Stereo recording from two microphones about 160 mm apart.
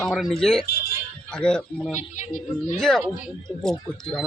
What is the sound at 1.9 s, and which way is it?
Speech, 50° left (ahead or behind).